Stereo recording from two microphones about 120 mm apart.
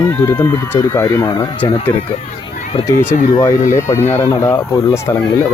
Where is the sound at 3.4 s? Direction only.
25° left (ahead or behind).